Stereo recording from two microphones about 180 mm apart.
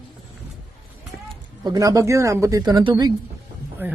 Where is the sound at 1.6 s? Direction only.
20° right (ahead or behind).